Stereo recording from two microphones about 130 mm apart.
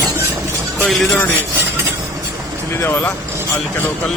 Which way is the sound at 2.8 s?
15° left (ahead or behind).